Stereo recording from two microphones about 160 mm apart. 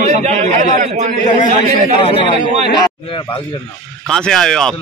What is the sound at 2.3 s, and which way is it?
Speech, 40° right (ahead or behind).